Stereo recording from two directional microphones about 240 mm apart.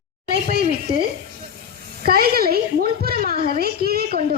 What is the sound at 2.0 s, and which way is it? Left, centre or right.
A woman's voice, right.